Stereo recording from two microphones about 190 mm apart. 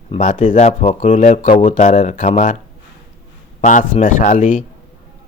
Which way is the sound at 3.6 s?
40° left (ahead or behind).